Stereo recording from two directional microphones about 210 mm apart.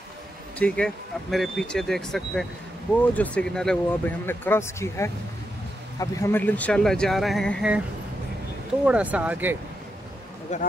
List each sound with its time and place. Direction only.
0.6 s speech: 5° left (ahead or behind)
8.8 s speech: 5° right (ahead or behind)
10.5 s a man's voice: 35° left (ahead or behind)